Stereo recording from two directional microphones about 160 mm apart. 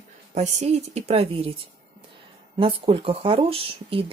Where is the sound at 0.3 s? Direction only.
45° right (ahead or behind).